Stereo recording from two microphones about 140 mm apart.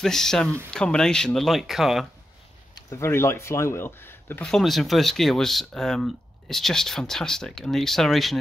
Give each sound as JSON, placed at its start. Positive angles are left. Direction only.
{"t": 0.0, "sound": "speech", "side_deg": 5}
{"t": 2.9, "sound": "speech", "side_deg": 20}
{"t": 4.5, "sound": "speech", "side_deg": 0}